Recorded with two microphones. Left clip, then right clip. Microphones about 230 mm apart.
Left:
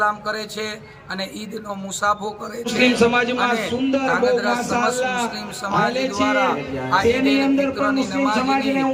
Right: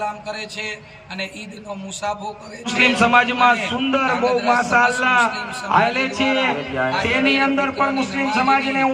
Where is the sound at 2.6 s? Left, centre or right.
Centre.